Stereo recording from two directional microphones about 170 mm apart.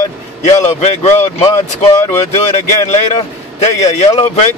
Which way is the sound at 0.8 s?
40° left (ahead or behind).